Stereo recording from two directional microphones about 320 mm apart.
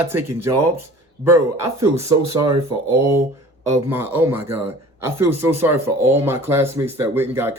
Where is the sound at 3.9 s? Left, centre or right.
Centre.